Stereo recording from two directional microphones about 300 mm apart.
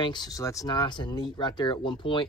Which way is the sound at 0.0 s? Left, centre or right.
Centre.